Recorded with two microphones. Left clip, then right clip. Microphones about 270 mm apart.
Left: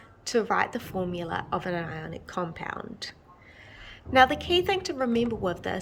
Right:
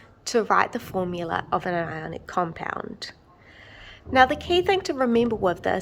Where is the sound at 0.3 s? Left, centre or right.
Centre.